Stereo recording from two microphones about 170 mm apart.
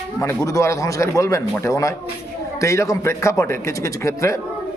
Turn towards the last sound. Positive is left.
turn(degrees=15)  # may be behind; listen again after turning